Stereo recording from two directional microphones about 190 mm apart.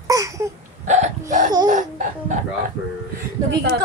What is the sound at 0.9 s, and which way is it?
Hiccup, 40° right (ahead or behind).